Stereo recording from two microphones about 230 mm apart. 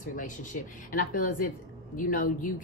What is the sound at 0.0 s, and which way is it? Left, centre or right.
Speech, left.